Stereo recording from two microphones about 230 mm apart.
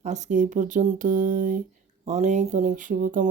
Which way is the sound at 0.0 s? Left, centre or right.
Right.